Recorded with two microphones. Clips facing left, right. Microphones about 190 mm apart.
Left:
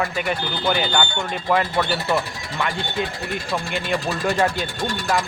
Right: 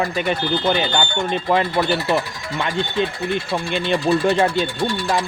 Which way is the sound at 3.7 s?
25° right (ahead or behind).